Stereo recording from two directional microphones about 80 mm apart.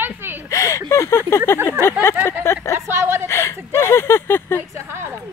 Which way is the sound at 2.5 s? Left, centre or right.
Left.